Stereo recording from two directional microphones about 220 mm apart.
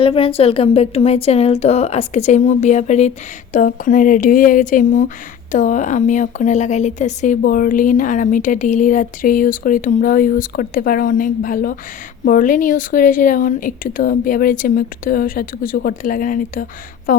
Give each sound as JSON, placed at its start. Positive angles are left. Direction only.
{"t": 0.0, "sound": "a woman's voice", "side_deg": 25}